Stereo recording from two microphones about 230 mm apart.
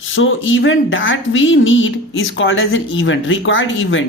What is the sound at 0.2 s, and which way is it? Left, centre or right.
Speech, left.